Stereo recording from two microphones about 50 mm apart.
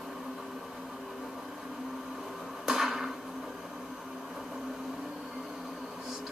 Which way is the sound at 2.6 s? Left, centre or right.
Centre.